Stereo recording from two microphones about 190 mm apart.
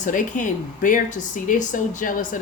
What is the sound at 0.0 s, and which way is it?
Speech, 45° left (ahead or behind).